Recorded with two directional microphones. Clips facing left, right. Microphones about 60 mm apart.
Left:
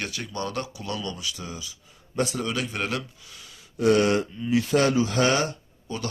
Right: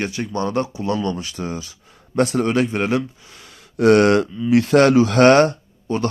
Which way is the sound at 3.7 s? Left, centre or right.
Right.